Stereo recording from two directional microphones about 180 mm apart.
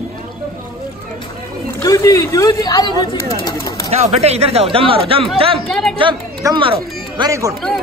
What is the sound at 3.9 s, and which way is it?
Speech, 35° right (ahead or behind).